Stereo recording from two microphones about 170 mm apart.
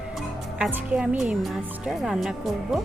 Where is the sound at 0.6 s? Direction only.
5° right (ahead or behind).